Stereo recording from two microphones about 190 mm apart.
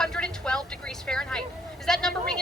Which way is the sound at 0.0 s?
5° left (ahead or behind).